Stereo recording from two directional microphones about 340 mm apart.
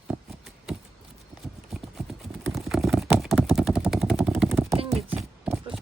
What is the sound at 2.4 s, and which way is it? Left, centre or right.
Vehicle, centre.